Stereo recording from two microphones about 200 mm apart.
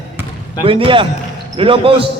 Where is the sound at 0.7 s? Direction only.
25° right (ahead or behind).